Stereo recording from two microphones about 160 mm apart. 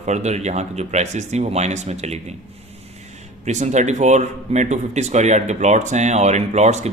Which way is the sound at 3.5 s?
45° right (ahead or behind).